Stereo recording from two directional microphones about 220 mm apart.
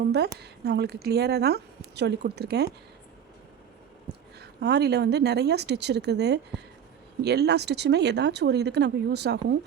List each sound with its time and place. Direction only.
0.0 s a woman's voice: 50° right (ahead or behind)
4.4 s a woman's voice: 50° right (ahead or behind)